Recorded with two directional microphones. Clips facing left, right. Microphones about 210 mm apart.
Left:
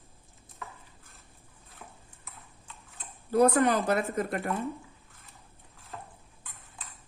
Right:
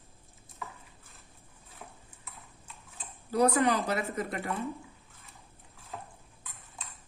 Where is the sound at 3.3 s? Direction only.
50° left (ahead or behind).